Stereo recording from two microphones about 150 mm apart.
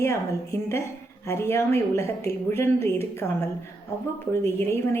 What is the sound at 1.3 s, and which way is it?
A woman's voice, 15° left (ahead or behind).